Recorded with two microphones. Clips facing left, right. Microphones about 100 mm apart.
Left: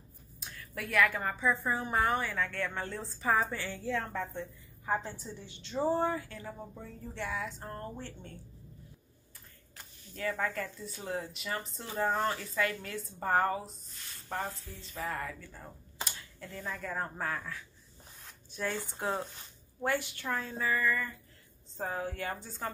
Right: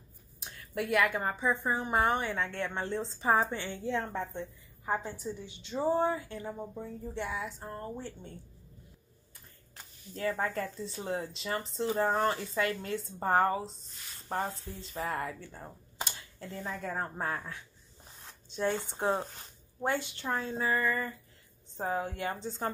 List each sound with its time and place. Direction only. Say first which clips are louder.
0.4 s a woman's voice: right 6 dB; 20° right (ahead or behind)
10.1 s a woman's voice: right 2 dB; 30° right (ahead or behind)
18.2 s a sound: right 4 dB; 25° right (ahead or behind)
18.8 s a woman's voice: right 3 dB; 25° right (ahead or behind)
20.5 s speech: right 1 dB; 35° right (ahead or behind)
21.7 s a woman's voice: right 3 dB; 20° right (ahead or behind)